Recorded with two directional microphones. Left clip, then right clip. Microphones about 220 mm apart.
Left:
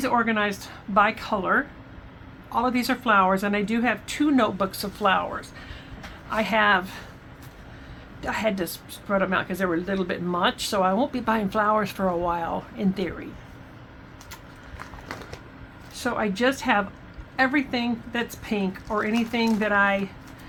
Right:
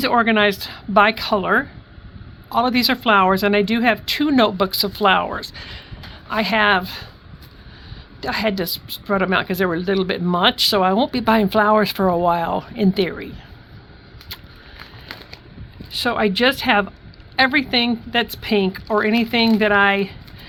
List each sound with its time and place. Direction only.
0.0 s a woman's voice: 45° right (ahead or behind)
8.2 s speech: 50° right (ahead or behind)
16.0 s a woman's voice: 50° right (ahead or behind)